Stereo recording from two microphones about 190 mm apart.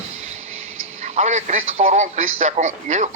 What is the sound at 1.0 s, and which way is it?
A man's voice, 35° right (ahead or behind).